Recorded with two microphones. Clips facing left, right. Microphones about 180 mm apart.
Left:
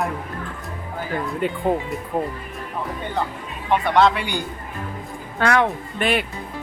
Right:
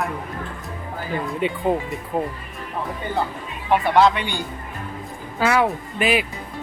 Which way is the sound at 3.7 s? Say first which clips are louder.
Right 1 dB; 5° right (ahead or behind).